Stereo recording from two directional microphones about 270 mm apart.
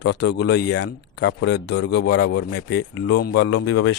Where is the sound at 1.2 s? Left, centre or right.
Left.